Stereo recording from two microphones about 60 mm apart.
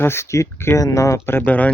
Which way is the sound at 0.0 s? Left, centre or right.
Left.